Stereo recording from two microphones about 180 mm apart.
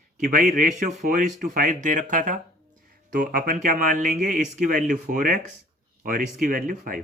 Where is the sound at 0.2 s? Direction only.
45° right (ahead or behind).